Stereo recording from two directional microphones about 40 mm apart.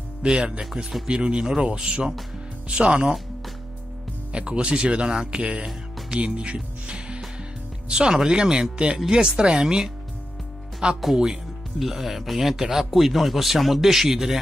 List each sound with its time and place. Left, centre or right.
0.2 s speech: right
4.3 s speech: right
6.1 s music: right
7.9 s speech: centre
11.8 s a man's voice: centre